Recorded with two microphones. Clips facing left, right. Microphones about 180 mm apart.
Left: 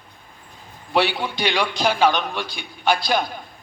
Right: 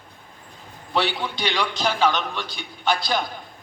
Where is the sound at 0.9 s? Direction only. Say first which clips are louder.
Left 3 dB; 15° left (ahead or behind).